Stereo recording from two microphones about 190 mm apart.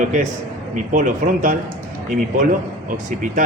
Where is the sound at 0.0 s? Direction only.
40° right (ahead or behind).